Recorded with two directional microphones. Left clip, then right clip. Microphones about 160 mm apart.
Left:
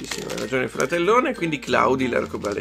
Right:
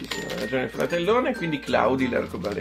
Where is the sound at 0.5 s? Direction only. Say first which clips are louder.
Left 3 dB; 55° left (ahead or behind).